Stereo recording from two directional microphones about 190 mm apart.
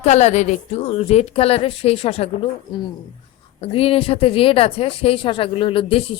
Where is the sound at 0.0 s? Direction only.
35° left (ahead or behind).